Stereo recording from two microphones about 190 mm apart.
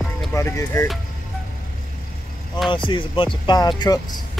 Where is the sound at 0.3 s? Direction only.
15° left (ahead or behind).